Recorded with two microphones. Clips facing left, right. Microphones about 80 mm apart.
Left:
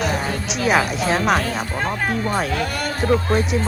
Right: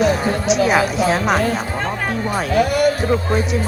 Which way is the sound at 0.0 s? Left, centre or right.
Centre.